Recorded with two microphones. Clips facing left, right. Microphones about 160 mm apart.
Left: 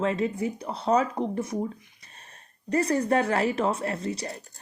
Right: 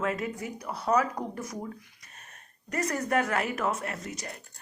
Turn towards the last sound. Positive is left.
turn(degrees=30)  # may be behind; listen again after turning